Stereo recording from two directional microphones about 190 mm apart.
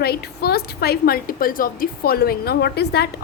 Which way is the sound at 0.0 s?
55° left (ahead or behind).